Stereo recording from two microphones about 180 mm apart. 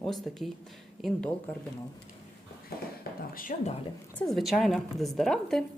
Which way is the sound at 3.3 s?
50° left (ahead or behind).